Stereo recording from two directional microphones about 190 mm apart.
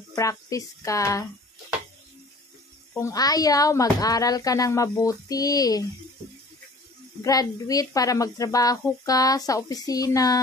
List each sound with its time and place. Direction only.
0.1 s speech: 15° left (ahead or behind)
2.9 s a woman's voice: 15° left (ahead or behind)
7.2 s a woman's voice: 20° left (ahead or behind)